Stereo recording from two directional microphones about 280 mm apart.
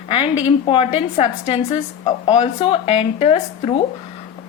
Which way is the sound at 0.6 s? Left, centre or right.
Centre.